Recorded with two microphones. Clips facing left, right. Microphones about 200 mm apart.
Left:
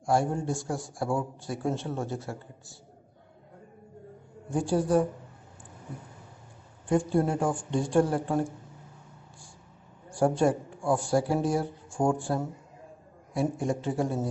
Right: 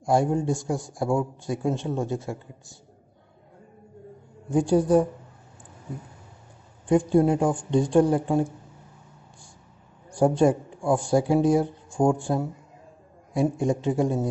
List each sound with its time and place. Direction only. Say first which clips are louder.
0.0 s a man's voice: right 4 dB; 15° right (ahead or behind)
4.6 s a man's voice: right 5 dB; 15° right (ahead or behind)
6.9 s a man's voice: right 6 dB; 15° right (ahead or behind)
10.0 s a man's voice: right 4 dB; 15° right (ahead or behind)